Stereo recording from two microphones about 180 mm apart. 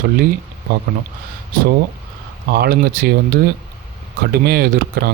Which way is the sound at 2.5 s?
60° right (ahead or behind).